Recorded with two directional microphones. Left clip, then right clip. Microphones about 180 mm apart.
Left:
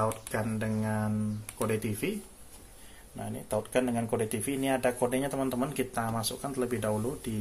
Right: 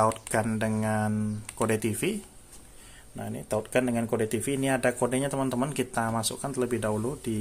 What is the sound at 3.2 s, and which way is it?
Speech, 30° right (ahead or behind).